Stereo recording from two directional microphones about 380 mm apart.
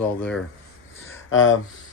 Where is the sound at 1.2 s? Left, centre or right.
Left.